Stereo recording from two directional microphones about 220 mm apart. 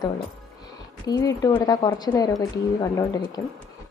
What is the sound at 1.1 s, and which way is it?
A woman's voice, 15° left (ahead or behind).